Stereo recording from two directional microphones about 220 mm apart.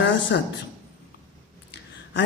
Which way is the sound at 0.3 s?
50° left (ahead or behind).